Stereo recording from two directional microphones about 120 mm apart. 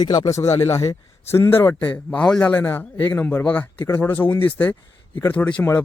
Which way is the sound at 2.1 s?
10° left (ahead or behind).